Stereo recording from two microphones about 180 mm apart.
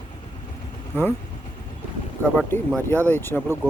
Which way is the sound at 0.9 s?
15° left (ahead or behind).